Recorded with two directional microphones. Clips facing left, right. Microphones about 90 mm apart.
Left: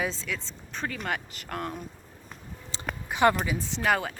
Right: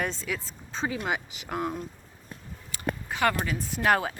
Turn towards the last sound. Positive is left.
turn(degrees=-5)  # may be behind; listen again after turning